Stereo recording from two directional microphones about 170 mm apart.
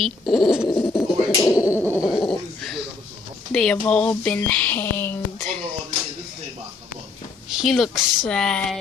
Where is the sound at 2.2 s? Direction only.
Centre (ahead or behind).